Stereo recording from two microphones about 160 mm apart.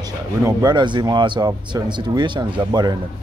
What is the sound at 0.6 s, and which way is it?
Speech, 30° right (ahead or behind).